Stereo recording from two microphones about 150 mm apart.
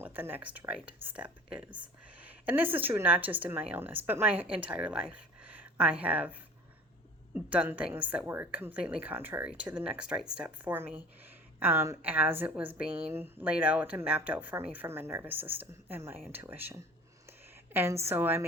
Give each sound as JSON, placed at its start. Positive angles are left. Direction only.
{"t": 0.0, "sound": "speech", "side_deg": -15}
{"t": 7.3, "sound": "speech", "side_deg": -10}
{"t": 18.0, "sound": "speech", "side_deg": -15}